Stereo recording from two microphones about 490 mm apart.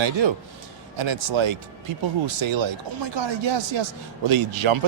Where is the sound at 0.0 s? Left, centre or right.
Right.